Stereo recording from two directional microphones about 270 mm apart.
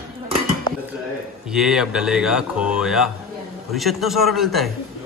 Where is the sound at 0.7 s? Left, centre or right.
Centre.